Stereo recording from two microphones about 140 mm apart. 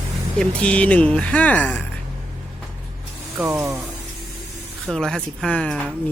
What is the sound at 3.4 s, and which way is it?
Speech, 20° right (ahead or behind).